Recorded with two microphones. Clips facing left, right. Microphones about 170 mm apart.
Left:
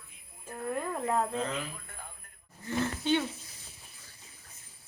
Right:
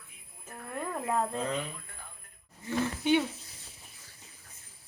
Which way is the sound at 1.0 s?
Centre (ahead or behind).